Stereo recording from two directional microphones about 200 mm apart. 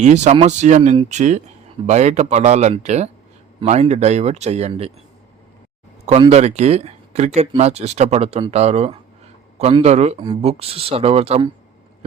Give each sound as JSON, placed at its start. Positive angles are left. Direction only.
{"t": 0.0, "sound": "speech", "side_deg": -35}
{"t": 6.1, "sound": "speech", "side_deg": -30}